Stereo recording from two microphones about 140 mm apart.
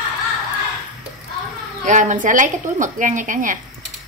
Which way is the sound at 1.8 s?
60° right (ahead or behind).